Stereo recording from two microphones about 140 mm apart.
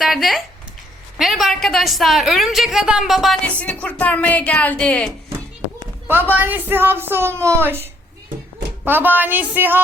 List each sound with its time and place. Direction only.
0.0 s a woman's voice: centre (ahead or behind)
5.8 s speech: 15° right (ahead or behind)